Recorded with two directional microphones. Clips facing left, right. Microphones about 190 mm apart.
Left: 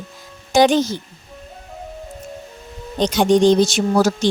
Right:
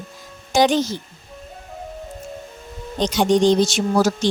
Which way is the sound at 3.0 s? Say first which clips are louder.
Left 2 dB; 55° left (ahead or behind).